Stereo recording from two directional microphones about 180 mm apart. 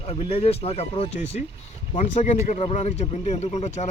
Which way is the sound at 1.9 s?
40° left (ahead or behind).